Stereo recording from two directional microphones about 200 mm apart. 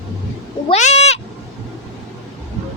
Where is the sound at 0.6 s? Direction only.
35° left (ahead or behind).